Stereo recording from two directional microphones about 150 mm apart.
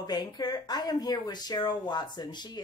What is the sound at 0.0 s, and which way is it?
Speech, 25° left (ahead or behind).